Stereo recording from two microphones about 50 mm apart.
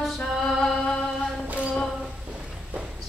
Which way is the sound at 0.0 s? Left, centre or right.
Centre.